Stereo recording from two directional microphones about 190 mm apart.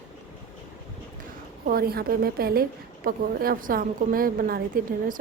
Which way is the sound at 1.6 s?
50° right (ahead or behind).